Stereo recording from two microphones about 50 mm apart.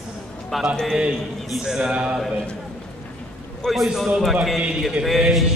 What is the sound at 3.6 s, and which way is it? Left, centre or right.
Speech, centre.